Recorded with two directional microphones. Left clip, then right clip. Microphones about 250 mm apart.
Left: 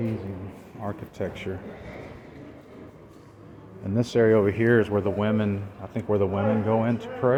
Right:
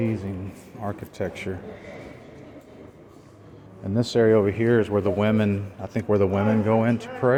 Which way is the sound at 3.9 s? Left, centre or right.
Centre.